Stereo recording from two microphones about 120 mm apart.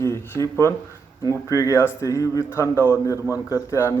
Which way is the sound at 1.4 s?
25° left (ahead or behind).